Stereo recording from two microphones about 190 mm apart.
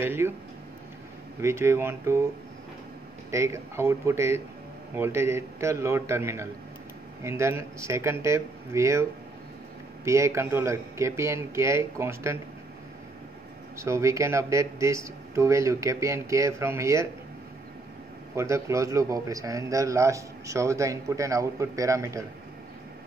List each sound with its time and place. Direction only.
0.0 s a man's voice: 10° right (ahead or behind)
1.4 s a man's voice: 15° right (ahead or behind)
3.3 s a man's voice: 15° right (ahead or behind)
10.0 s a man's voice: 15° right (ahead or behind)
13.7 s a man's voice: 15° right (ahead or behind)
18.3 s a man's voice: 15° right (ahead or behind)